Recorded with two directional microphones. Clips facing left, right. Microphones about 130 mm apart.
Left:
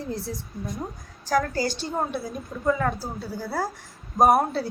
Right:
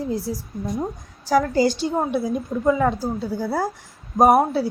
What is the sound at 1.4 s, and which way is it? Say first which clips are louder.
A woman's voice: right 7 dB; 20° right (ahead or behind).